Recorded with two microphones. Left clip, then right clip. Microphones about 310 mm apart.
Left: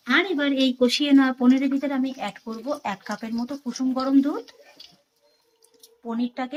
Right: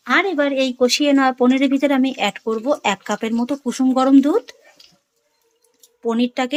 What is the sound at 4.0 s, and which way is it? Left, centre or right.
Speech, right.